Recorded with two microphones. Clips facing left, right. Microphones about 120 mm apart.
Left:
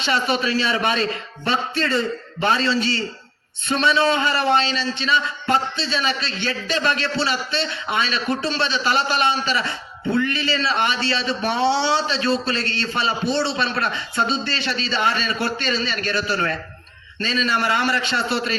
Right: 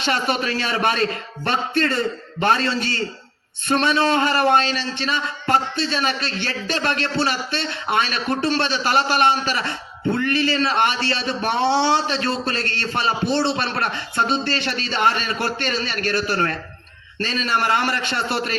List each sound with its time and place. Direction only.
0.0 s speech: 50° right (ahead or behind)